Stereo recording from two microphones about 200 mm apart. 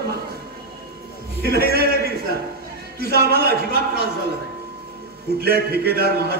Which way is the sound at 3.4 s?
50° right (ahead or behind).